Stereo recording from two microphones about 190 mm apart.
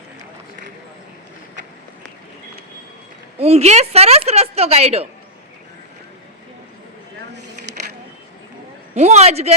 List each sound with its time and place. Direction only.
3.3 s a woman's voice: 35° right (ahead or behind)
9.0 s a woman's voice: 35° right (ahead or behind)